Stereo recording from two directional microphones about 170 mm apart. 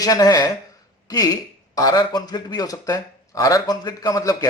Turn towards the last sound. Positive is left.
turn(degrees=20)  # may be behind; listen again after turning